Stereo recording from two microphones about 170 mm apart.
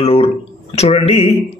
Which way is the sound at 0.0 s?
35° left (ahead or behind).